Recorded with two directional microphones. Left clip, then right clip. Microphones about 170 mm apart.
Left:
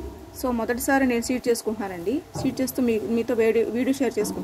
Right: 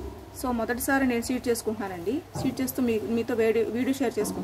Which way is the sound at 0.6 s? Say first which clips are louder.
Left 3 dB; 15° left (ahead or behind).